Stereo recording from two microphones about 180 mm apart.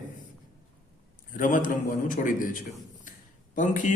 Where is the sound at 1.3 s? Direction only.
45° left (ahead or behind).